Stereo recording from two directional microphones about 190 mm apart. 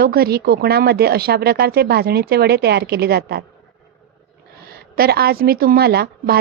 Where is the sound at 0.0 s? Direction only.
55° right (ahead or behind).